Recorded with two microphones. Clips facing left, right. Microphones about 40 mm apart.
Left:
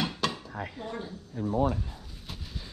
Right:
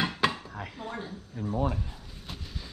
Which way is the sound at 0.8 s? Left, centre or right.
Centre.